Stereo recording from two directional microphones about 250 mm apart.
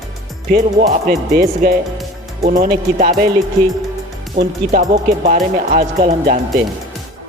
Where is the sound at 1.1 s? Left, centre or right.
Right.